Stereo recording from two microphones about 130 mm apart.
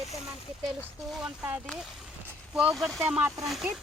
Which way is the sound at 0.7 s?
Centre (ahead or behind).